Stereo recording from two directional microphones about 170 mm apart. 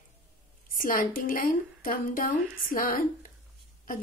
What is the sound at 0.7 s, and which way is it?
Speech, 55° left (ahead or behind).